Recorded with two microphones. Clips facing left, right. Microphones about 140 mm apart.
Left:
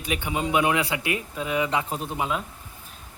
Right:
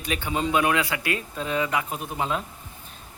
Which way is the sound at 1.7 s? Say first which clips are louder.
Left 1 dB; 30° left (ahead or behind).